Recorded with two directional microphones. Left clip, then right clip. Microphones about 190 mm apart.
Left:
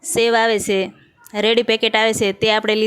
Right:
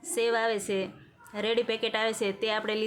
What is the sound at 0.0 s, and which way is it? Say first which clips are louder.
A woman's voice: left 11 dB; 45° left (ahead or behind).